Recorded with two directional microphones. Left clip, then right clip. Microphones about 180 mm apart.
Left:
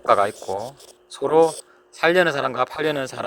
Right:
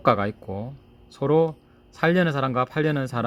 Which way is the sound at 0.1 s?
30° left (ahead or behind).